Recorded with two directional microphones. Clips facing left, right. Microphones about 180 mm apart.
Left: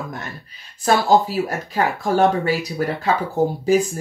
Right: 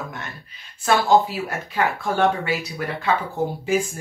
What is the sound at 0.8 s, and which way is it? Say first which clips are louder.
Speech: left 1 dB; 40° left (ahead or behind).